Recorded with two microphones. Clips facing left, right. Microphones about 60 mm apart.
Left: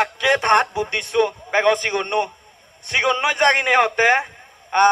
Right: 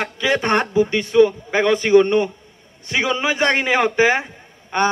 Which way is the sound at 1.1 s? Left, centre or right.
Centre.